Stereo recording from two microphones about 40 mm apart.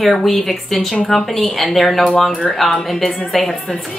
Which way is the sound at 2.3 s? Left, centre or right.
Centre.